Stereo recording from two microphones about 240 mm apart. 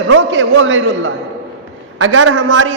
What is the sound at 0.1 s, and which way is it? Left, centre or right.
A man's voice, right.